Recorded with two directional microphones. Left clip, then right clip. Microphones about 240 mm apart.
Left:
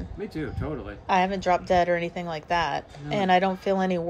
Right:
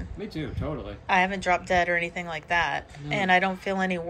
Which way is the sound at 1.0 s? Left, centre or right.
Centre.